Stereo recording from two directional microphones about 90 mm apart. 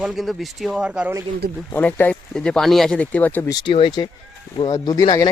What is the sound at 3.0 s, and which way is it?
Speech, 15° left (ahead or behind).